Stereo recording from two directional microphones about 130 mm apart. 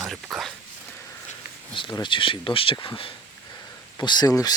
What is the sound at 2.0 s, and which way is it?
Speech, 40° left (ahead or behind).